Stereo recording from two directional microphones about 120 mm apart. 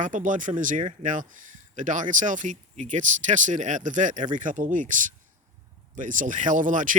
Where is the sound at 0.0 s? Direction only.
90° right.